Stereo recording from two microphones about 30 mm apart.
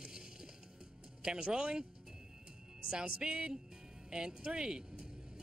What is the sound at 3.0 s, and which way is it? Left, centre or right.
Speech, right.